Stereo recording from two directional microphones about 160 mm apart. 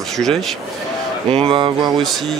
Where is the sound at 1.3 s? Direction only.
35° right (ahead or behind).